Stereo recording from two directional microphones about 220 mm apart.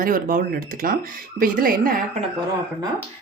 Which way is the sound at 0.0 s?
40° right (ahead or behind).